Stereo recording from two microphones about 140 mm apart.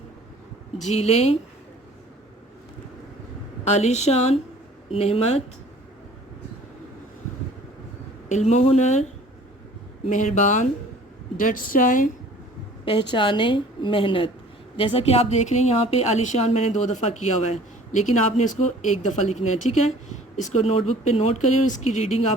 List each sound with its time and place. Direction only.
0.8 s a woman's voice: 50° left (ahead or behind)
3.6 s a woman's voice: 55° left (ahead or behind)
8.3 s speech: 60° left (ahead or behind)
10.1 s speech: 60° left (ahead or behind)
11.3 s a woman's voice: 70° left (ahead or behind)
12.8 s a woman's voice: 40° left (ahead or behind)